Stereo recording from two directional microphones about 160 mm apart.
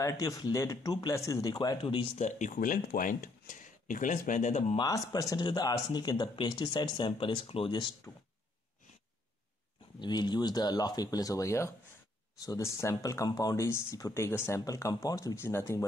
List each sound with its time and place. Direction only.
0.0 s speech: 20° left (ahead or behind)
2.2 s speech: 50° left (ahead or behind)
4.7 s speech: 20° left (ahead or behind)
9.9 s speech: 25° left (ahead or behind)